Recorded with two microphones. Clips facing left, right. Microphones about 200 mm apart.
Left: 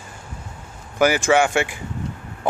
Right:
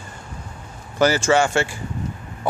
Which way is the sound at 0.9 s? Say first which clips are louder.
Even; 15° left (ahead or behind).